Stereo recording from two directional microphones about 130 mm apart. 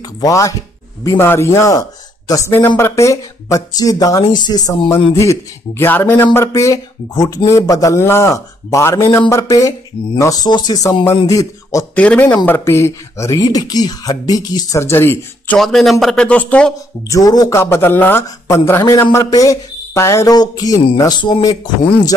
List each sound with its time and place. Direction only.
0.2 s a man's voice: 25° left (ahead or behind)
11.9 s a man's voice: 10° left (ahead or behind)
15.6 s speech: centre (ahead or behind)
17.1 s a man's voice: 30° left (ahead or behind)
17.6 s a man's voice: 20° left (ahead or behind); by 21.5 s 35° left (ahead or behind)